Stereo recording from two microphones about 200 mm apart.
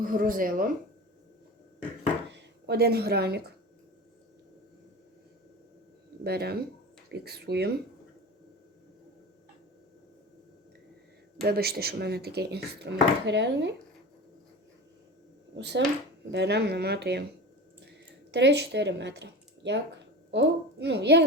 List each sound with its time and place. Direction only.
0.0 s speech: 45° right (ahead or behind)
2.3 s speech: 55° right (ahead or behind)
6.2 s a woman's voice: 50° right (ahead or behind)
11.4 s speech: 50° right (ahead or behind)
15.5 s a woman's voice: 60° right (ahead or behind)
17.8 s a sound: 60° right (ahead or behind)
20.3 s a woman's voice: 60° right (ahead or behind)